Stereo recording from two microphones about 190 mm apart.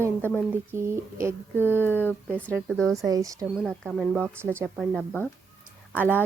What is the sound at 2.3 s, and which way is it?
Speech, 10° right (ahead or behind).